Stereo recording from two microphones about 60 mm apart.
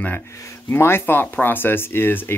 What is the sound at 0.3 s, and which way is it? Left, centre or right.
Speech, left.